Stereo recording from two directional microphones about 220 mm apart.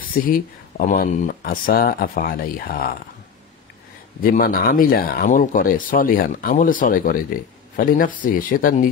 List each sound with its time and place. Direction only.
0.0 s speech: 40° left (ahead or behind)
4.2 s speech: 40° left (ahead or behind)